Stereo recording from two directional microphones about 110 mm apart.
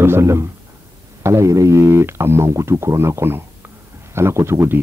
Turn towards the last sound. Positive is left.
turn(degrees=-25)  # may be behind; listen again after turning